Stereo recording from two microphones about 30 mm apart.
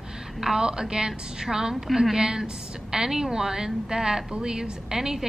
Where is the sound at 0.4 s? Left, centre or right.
Centre.